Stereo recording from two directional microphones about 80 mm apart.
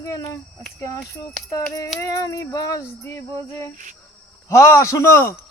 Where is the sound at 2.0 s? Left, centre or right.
Left.